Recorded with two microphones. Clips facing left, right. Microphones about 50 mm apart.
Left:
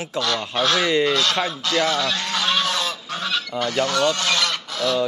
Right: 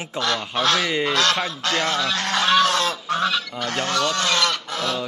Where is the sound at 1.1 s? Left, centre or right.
Right.